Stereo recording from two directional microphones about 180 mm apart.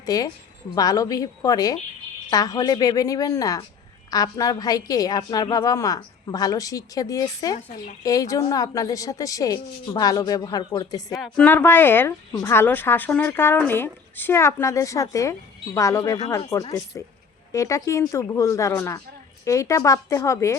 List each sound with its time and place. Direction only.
0.0 s a woman's voice: 20° left (ahead or behind)
11.2 s speech: 5° left (ahead or behind)